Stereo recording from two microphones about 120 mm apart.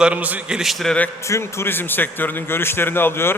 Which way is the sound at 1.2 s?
25° left (ahead or behind).